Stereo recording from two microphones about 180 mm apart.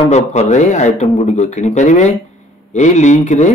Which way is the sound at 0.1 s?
40° left (ahead or behind).